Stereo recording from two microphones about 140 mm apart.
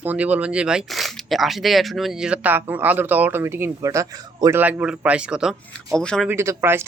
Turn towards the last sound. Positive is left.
turn(degrees=-15)  # may be behind; listen again after turning